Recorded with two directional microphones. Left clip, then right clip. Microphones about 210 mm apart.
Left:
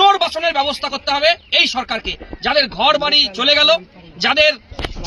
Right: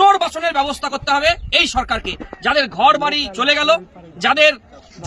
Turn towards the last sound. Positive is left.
turn(degrees=-5)  # may be behind; listen again after turning